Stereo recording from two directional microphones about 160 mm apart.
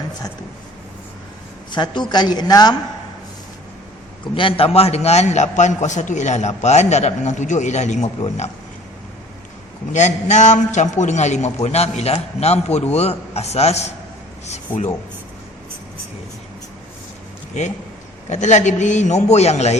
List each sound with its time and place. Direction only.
1.7 s a woman's voice: 30° left (ahead or behind)
4.4 s a man's voice: 35° left (ahead or behind)
9.9 s a man's voice: 45° left (ahead or behind)
17.6 s a man's voice: 45° left (ahead or behind)